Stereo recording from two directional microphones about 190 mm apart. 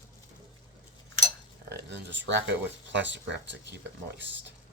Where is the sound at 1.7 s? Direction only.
65° right (ahead or behind).